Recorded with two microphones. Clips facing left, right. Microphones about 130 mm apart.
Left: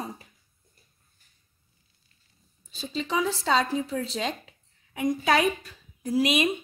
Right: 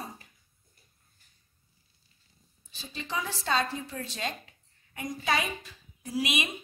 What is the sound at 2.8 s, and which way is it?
A woman's voice, 80° left.